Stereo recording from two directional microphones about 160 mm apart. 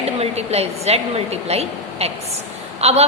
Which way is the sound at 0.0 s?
40° right (ahead or behind).